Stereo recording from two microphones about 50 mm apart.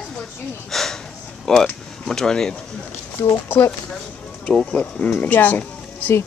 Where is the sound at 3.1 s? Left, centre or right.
Left.